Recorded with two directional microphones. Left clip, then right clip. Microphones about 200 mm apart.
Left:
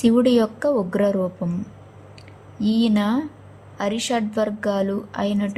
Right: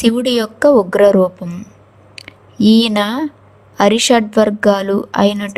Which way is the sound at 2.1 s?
55° right (ahead or behind).